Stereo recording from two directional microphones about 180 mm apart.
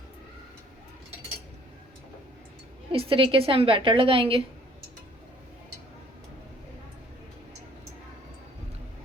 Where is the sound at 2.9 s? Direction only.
30° right (ahead or behind).